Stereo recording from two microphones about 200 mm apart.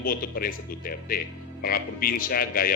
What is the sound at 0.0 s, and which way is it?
A man's voice, 45° left (ahead or behind).